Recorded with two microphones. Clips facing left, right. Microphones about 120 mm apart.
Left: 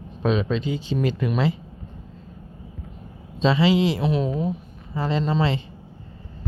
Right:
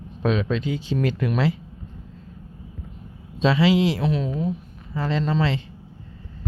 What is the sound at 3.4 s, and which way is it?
Speech, 5° right (ahead or behind).